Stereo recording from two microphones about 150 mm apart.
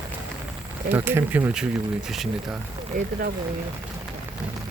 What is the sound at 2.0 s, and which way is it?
Speech, centre (ahead or behind).